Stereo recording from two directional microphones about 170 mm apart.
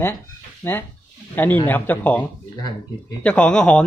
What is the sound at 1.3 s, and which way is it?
Speech, 10° left (ahead or behind).